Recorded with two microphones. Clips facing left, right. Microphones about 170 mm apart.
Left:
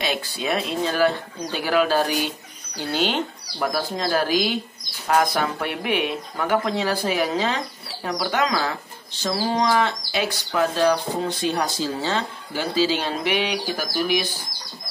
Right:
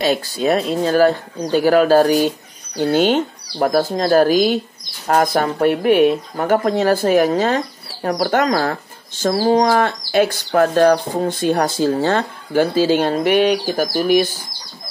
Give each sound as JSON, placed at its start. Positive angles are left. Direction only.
{"t": 0.0, "sound": "speech", "side_deg": -40}